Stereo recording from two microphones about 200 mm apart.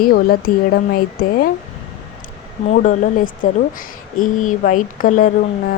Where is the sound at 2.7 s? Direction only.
40° left (ahead or behind).